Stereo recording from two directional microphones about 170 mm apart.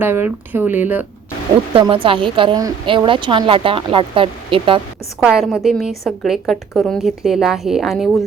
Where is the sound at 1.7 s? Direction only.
30° right (ahead or behind).